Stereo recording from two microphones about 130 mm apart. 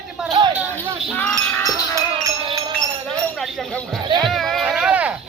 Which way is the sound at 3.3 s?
Centre (ahead or behind).